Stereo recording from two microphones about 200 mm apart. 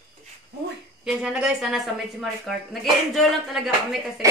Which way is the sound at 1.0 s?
5° right (ahead or behind).